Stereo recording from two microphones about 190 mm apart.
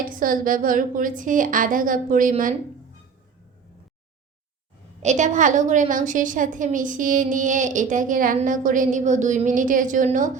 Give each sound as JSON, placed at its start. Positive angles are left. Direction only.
{"t": 0.0, "sound": "a woman's voice", "side_deg": -45}
{"t": 5.0, "sound": "a woman's voice", "side_deg": -40}